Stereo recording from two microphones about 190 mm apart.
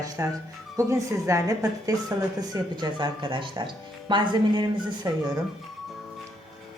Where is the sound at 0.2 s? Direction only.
15° right (ahead or behind).